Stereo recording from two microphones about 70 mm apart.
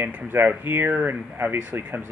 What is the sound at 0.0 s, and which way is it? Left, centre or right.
Speech, right.